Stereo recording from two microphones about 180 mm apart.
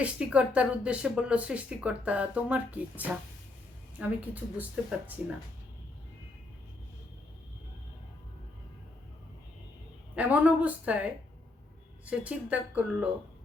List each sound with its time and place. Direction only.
0.0 s speech: 5° right (ahead or behind)
10.2 s speech: 5° right (ahead or behind)